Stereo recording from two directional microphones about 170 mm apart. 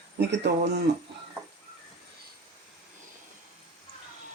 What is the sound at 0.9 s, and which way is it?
Speech, 85° right.